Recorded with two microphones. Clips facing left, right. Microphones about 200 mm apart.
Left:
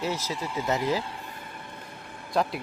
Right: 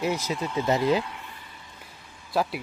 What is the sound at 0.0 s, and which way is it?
Speech, 15° right (ahead or behind).